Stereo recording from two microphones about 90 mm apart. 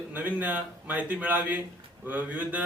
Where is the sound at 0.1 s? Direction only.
20° right (ahead or behind).